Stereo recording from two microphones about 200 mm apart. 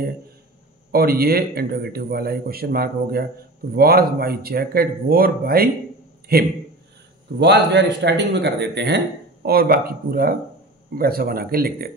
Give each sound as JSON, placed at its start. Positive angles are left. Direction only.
{"t": 0.9, "sound": "a man's voice", "side_deg": -50}